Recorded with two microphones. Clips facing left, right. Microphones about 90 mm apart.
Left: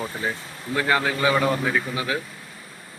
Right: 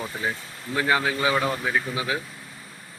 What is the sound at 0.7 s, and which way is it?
A man's voice, 10° right (ahead or behind).